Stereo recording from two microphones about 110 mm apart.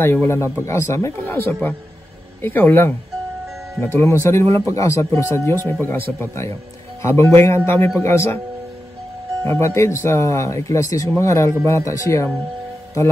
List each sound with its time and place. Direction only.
0.0 s speech: 20° left (ahead or behind)
9.4 s speech: 25° left (ahead or behind)